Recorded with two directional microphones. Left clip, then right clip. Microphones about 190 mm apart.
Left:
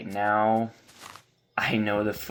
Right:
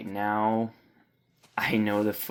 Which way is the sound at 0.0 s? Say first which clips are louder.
Left 3 dB; 35° right (ahead or behind).